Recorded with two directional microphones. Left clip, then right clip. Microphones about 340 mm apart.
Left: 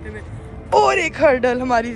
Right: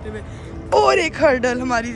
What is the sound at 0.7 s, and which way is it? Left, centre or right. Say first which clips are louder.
Speech: even; centre.